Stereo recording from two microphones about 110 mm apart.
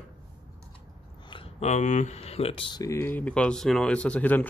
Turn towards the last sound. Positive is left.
turn(degrees=15)  # may be behind; listen again after turning